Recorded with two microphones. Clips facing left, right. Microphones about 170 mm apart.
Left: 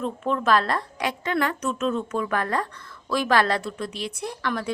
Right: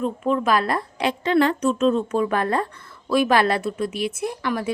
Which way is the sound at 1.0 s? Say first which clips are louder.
Right 7 dB; 30° right (ahead or behind).